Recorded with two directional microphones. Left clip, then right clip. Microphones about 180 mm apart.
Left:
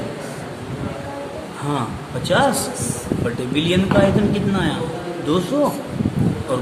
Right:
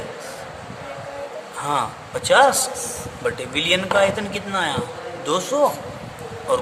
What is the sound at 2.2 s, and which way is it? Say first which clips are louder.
A man's voice: right 3 dB; 35° right (ahead or behind).